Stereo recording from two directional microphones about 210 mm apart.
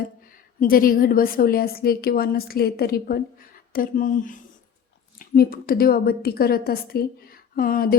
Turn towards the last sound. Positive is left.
turn(degrees=45)  # may be behind; listen again after turning